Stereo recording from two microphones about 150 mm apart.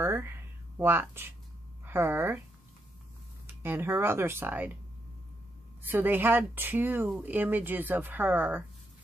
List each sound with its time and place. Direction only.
0.0 s a sound: 15° right (ahead or behind)
0.7 s speech: 15° right (ahead or behind)
3.4 s speech: 15° right (ahead or behind)
5.8 s speech: 15° right (ahead or behind)